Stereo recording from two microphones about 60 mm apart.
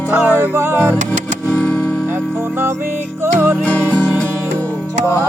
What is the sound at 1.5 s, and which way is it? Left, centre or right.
Music, left.